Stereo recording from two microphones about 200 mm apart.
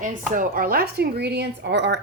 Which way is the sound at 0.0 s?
40° right (ahead or behind).